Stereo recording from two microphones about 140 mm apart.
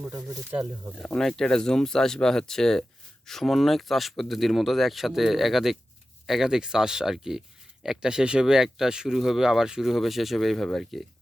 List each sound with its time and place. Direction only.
0.9 s speech: 5° left (ahead or behind)